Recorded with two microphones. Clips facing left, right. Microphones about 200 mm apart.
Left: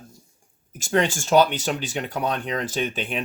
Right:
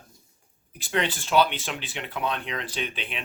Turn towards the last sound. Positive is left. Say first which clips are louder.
# left 7 dB
turn(degrees=45)  # may be behind; listen again after turning